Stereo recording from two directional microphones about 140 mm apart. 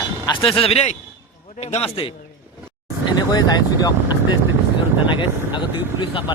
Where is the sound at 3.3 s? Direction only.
30° left (ahead or behind).